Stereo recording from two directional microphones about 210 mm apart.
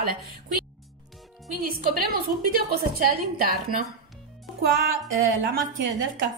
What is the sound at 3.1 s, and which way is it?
Speech, 45° right (ahead or behind).